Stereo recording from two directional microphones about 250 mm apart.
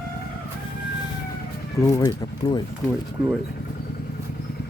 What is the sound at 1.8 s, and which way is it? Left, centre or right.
Speech, centre.